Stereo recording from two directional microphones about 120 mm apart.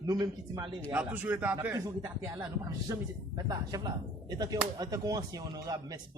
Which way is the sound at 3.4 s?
30° right (ahead or behind).